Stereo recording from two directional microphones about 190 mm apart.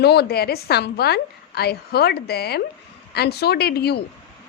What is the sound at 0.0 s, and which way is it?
A woman's voice, 60° left (ahead or behind).